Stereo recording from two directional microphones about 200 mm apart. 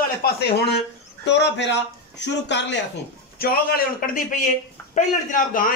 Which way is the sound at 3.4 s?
50° left (ahead or behind).